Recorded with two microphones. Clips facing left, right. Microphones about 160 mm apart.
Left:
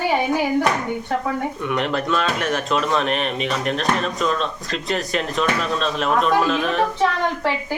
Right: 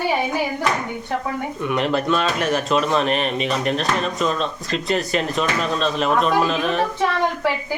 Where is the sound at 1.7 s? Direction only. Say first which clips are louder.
Right 3 dB; centre (ahead or behind).